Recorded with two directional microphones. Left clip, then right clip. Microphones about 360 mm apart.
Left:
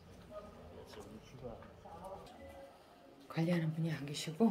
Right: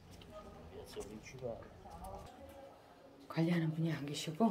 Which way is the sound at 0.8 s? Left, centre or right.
Right.